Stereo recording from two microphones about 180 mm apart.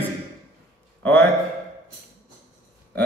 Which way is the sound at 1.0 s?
10° left (ahead or behind).